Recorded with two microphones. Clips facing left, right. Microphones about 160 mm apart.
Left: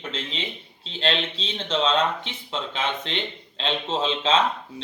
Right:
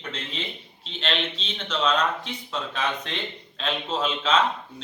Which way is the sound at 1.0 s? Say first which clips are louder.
Left 3 dB; 35° left (ahead or behind).